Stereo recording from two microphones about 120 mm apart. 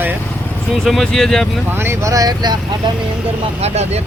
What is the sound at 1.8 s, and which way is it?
Speech, 20° right (ahead or behind).